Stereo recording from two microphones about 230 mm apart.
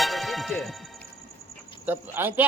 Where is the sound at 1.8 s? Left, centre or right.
Centre.